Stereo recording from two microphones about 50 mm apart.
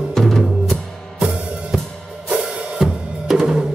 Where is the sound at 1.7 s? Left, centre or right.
Centre.